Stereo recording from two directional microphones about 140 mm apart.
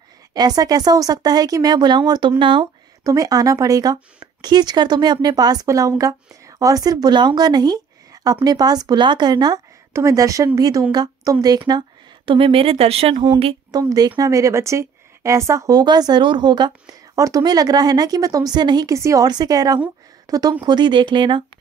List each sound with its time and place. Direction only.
0.3 s speech: 25° right (ahead or behind)
12.3 s speech: 40° right (ahead or behind)
13.7 s speech: 25° right (ahead or behind)